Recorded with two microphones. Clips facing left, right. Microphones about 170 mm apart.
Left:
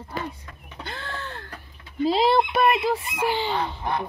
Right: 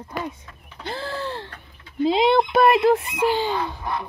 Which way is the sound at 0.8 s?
35° right (ahead or behind).